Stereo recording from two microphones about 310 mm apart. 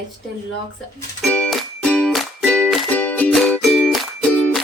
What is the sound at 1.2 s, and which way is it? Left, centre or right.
Music, centre.